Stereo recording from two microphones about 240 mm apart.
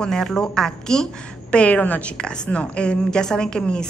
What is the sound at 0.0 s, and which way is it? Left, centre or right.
A woman's voice, centre.